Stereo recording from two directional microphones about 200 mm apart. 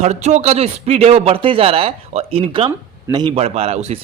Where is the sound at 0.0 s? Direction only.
35° right (ahead or behind).